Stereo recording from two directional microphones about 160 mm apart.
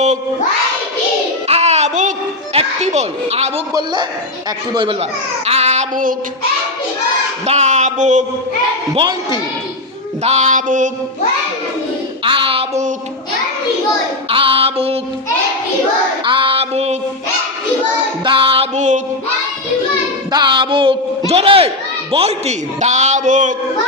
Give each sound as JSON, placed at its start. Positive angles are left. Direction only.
{"t": 1.5, "sound": "music", "side_deg": -40}
{"t": 3.7, "sound": "a man's voice", "side_deg": -25}
{"t": 5.5, "sound": "child singing", "side_deg": -40}
{"t": 7.4, "sound": "a man's voice", "side_deg": -45}
{"t": 10.2, "sound": "a man's voice", "side_deg": -50}
{"t": 12.2, "sound": "music", "side_deg": -35}
{"t": 14.3, "sound": "female singing", "side_deg": -35}
{"t": 16.2, "sound": "female singing", "side_deg": -35}
{"t": 18.3, "sound": "music", "side_deg": -35}
{"t": 20.3, "sound": "music", "side_deg": -30}
{"t": 21.2, "sound": "a sound", "side_deg": -40}
{"t": 22.1, "sound": "a man's voice", "side_deg": -40}